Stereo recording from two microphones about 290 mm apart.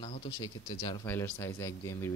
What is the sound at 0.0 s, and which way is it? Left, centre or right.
Speech, centre.